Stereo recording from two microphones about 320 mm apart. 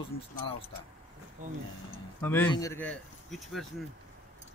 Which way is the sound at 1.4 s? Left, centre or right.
Right.